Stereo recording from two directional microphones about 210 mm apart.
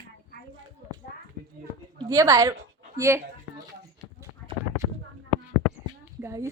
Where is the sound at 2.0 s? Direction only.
15° right (ahead or behind).